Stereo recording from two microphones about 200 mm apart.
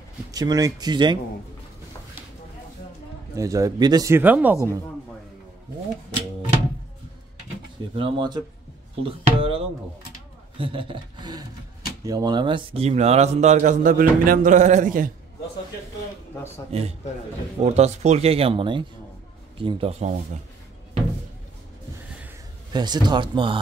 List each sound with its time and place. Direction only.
0.3 s speech: 20° right (ahead or behind)
3.3 s speech: 15° right (ahead or behind)
7.9 s speech: 25° right (ahead or behind)
10.6 s speech: 25° right (ahead or behind); by 15.0 s 40° right (ahead or behind)
17.6 s speech: 35° right (ahead or behind)
22.7 s speech: 20° right (ahead or behind)